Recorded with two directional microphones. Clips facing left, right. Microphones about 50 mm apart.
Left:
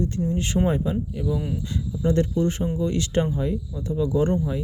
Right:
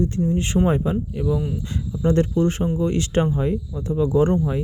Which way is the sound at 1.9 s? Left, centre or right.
Right.